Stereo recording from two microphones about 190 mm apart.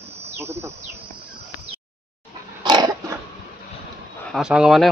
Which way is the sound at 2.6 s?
20° right (ahead or behind).